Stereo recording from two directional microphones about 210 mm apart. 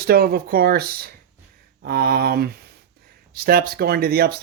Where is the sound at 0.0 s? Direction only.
50° right (ahead or behind).